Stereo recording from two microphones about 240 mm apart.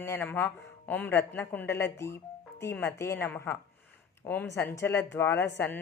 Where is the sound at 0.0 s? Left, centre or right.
Centre.